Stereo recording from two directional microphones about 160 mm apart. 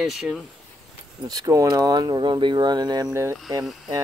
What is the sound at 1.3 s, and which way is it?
Speech, 20° right (ahead or behind).